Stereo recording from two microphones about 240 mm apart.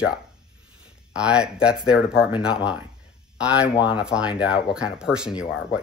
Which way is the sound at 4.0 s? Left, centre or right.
Centre.